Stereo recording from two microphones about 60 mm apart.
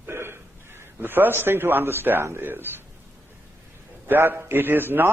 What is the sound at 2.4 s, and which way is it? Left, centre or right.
Speech, right.